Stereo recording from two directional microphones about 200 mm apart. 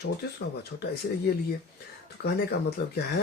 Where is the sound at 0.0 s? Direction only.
55° left (ahead or behind).